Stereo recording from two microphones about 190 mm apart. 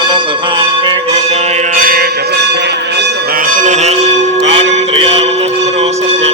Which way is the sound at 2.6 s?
65° right (ahead or behind).